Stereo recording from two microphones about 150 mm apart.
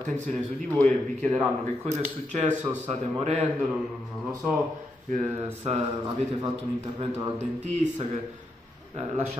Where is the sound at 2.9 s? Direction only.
45° right (ahead or behind).